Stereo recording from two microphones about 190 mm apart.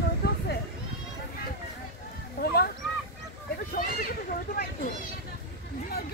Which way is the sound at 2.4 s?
55° left (ahead or behind).